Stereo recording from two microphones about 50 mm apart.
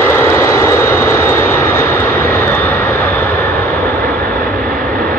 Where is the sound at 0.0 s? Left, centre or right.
Left.